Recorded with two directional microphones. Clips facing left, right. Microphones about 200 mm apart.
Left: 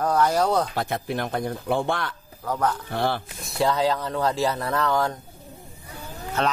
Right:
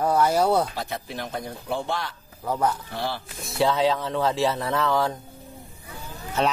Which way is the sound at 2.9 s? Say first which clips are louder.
Left 5 dB; 55° left (ahead or behind).